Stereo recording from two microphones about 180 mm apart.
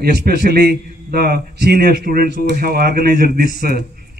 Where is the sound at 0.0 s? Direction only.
60° right (ahead or behind).